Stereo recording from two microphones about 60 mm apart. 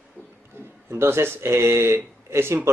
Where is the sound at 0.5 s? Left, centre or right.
Right.